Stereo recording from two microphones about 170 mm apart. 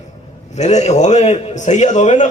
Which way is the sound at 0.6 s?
40° left (ahead or behind).